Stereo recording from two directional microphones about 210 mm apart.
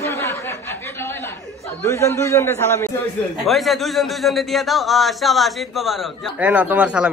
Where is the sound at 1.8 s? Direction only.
15° left (ahead or behind).